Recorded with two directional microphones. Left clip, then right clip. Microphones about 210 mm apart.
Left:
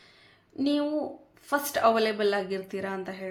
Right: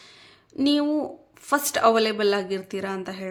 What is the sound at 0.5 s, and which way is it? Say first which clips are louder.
A woman's voice: right 5 dB; 30° right (ahead or behind).